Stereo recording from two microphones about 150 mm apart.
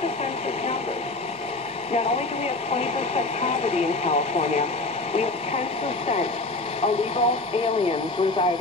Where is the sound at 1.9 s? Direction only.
45° left (ahead or behind).